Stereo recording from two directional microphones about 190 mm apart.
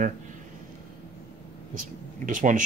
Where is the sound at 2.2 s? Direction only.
40° right (ahead or behind).